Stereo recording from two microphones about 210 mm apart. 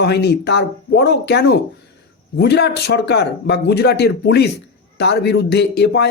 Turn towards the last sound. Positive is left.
turn(degrees=50)  # may be behind; listen again after turning